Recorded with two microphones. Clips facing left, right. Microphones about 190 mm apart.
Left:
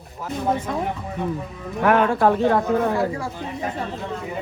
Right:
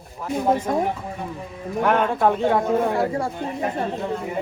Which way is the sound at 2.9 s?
25° right (ahead or behind).